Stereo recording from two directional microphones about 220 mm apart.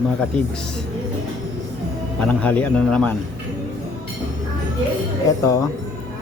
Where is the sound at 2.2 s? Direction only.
5° left (ahead or behind).